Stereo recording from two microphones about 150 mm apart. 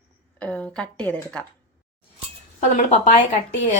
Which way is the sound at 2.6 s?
55° left (ahead or behind).